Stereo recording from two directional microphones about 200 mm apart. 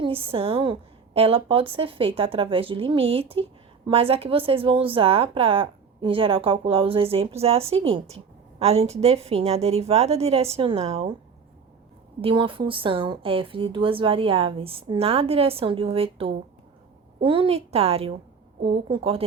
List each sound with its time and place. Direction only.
0.0 s speech: 25° right (ahead or behind)
12.2 s a woman's voice: 25° right (ahead or behind)